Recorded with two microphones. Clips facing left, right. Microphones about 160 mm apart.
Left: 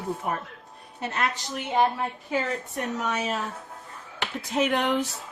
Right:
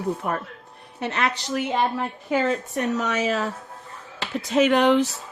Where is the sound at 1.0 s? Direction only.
75° right (ahead or behind).